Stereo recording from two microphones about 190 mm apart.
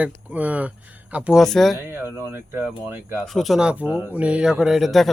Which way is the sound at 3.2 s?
Centre (ahead or behind).